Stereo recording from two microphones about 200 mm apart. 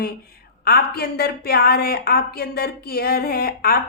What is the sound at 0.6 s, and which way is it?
A woman's voice, 50° left (ahead or behind).